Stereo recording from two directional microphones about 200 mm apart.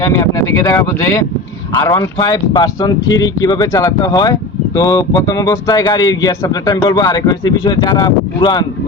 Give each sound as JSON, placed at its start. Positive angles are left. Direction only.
{"t": 0.0, "sound": "speech", "side_deg": 15}